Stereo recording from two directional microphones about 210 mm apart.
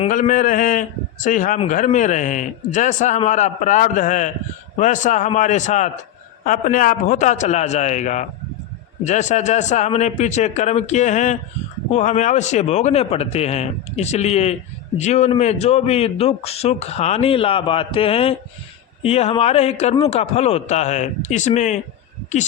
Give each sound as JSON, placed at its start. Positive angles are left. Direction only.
{"t": 0.1, "sound": "a man's voice", "side_deg": 40}